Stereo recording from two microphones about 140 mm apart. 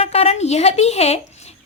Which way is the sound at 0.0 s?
45° left (ahead or behind).